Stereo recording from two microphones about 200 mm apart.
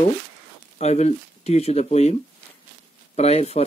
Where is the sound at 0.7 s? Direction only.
35° left (ahead or behind).